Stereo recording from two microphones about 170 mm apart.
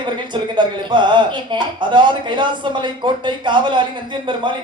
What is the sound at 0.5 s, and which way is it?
Speech, 30° right (ahead or behind).